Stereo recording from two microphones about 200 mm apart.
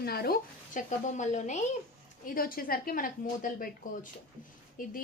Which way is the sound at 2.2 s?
45° left (ahead or behind).